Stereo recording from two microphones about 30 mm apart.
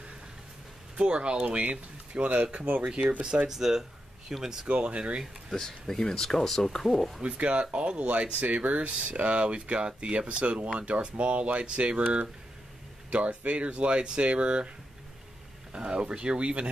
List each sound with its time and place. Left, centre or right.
0.9 s speech: right
1.6 s speech: right
3.4 s speech: centre
4.6 s speech: right
5.5 s speech: centre
7.2 s speech: right
13.1 s speech: right
15.7 s speech: right